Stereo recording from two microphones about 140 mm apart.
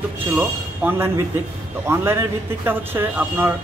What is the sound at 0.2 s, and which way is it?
Speech, 15° right (ahead or behind).